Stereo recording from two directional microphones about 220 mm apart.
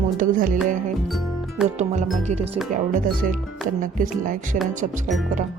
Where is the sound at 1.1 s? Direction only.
Centre (ahead or behind).